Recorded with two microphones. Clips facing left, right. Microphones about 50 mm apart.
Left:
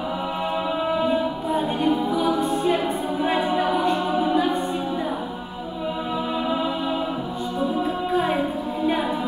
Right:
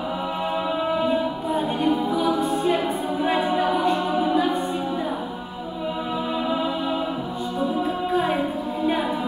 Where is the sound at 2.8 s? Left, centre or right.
Centre.